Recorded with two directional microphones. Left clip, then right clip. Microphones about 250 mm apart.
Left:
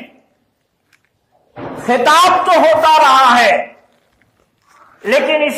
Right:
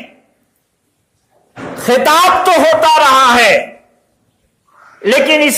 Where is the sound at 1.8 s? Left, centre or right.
Right.